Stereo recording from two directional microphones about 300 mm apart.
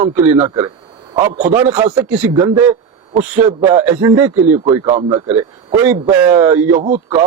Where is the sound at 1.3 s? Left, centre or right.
Right.